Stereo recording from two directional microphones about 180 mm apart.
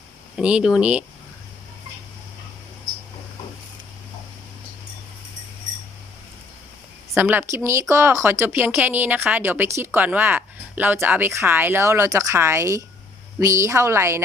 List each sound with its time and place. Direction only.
0.3 s a woman's voice: 5° right (ahead or behind)
7.1 s a woman's voice: 10° right (ahead or behind)